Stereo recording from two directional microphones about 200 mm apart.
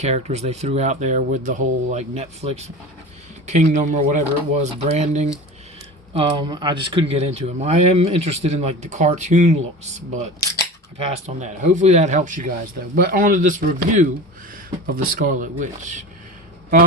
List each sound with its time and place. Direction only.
0.0 s speech: 35° right (ahead or behind)
6.1 s speech: 25° right (ahead or behind); by 16.0 s 40° right (ahead or behind)